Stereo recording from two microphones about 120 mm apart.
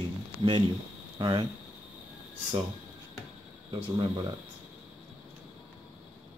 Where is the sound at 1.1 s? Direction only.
40° right (ahead or behind).